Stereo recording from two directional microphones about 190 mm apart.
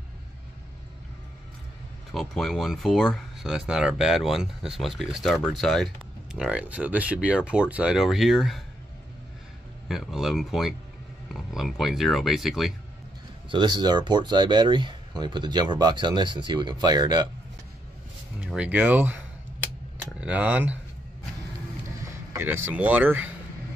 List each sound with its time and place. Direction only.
2.1 s speech: centre (ahead or behind)
9.8 s speech: centre (ahead or behind)
13.5 s speech: 25° right (ahead or behind)
18.5 s speech: 5° right (ahead or behind)
22.0 s speech: 15° right (ahead or behind)